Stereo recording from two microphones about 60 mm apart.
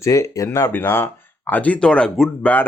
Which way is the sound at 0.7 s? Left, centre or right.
Left.